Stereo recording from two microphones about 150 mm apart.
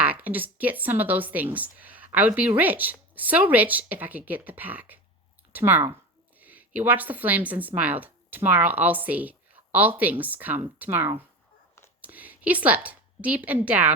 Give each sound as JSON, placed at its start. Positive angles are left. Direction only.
{"t": 0.0, "sound": "a woman's voice", "side_deg": -10}